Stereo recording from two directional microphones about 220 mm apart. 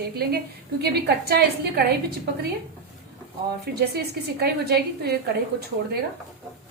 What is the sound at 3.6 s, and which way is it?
A woman's voice, 45° right (ahead or behind).